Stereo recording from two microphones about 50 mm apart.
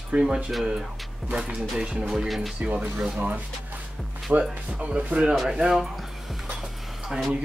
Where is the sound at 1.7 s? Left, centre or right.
Centre.